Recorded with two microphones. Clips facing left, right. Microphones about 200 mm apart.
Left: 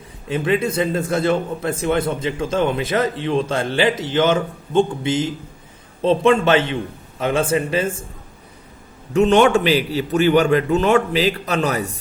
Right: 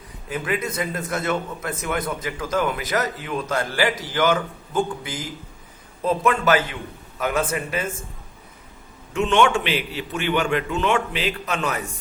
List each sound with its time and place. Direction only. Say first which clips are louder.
0.3 s a man's voice: left 7 dB; 25° left (ahead or behind)
9.1 s a man's voice: left 6 dB; 40° left (ahead or behind)